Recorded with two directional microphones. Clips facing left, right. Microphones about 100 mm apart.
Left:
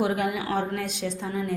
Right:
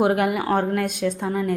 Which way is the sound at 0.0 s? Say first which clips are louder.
Right 6 dB; 60° right (ahead or behind).